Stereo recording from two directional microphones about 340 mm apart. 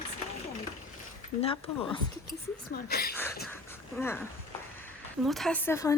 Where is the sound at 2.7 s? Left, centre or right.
Left.